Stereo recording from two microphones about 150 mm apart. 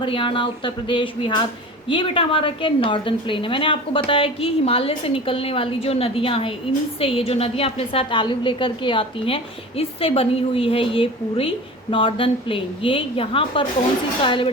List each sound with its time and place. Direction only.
0.0 s a woman's voice: 35° left (ahead or behind)